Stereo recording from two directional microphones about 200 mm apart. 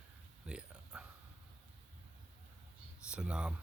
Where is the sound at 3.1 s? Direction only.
5° right (ahead or behind).